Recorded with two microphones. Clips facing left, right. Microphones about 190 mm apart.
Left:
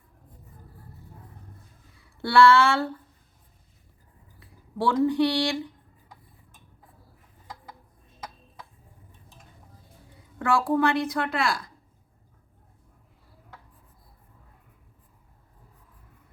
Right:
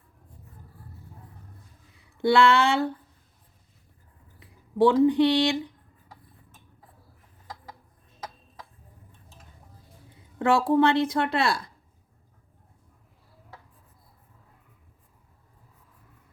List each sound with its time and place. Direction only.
2.0 s a sound: 20° right (ahead or behind)
4.4 s speech: 20° right (ahead or behind)
10.3 s a woman's voice: 20° right (ahead or behind)